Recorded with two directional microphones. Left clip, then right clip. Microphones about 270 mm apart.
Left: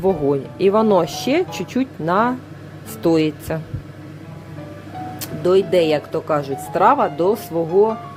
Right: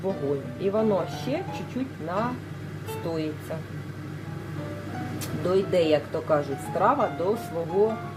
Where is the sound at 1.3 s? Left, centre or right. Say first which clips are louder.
Left 11 dB; left.